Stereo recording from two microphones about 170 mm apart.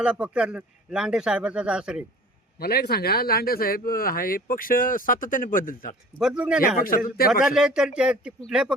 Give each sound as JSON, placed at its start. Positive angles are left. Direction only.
{"t": 0.0, "sound": "speech", "side_deg": -5}
{"t": 2.6, "sound": "speech", "side_deg": 65}
{"t": 6.1, "sound": "speech", "side_deg": -5}
{"t": 6.6, "sound": "speech", "side_deg": 55}
{"t": 7.4, "sound": "speech", "side_deg": -5}